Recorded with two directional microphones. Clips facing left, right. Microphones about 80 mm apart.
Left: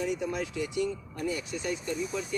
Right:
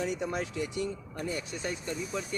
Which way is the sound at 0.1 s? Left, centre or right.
Right.